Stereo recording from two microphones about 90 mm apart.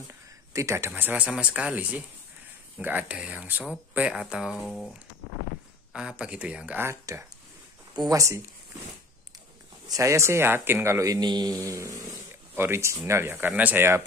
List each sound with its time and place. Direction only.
0.5 s speech: 35° right (ahead or behind); by 4.6 s 5° right (ahead or behind)
4.6 s speech: 5° left (ahead or behind)
5.9 s speech: 10° right (ahead or behind)
6.8 s speech: 30° right (ahead or behind)
9.8 s speech: 35° right (ahead or behind)
11.1 s a sound: 55° right (ahead or behind); by 12.0 s 35° right (ahead or behind)
12.5 s speech: 25° right (ahead or behind)